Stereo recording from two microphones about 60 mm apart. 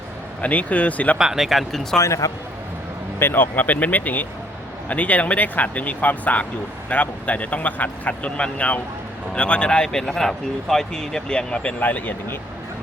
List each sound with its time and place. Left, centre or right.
0.4 s speech: left
1.2 s speech: centre
2.0 s speech: left
3.2 s speech: left; by 11.7 s centre
11.8 s speech: left